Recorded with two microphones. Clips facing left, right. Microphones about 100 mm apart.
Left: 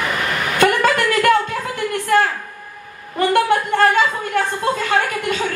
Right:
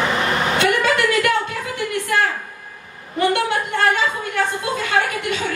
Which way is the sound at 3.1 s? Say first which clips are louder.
Left 3 dB; 45° left (ahead or behind).